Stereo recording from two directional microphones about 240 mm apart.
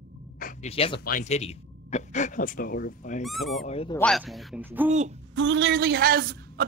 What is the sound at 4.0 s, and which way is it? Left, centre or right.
Speech, centre.